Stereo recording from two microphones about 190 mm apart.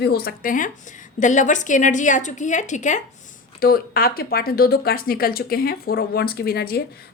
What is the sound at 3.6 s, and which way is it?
Speech, 50° left (ahead or behind).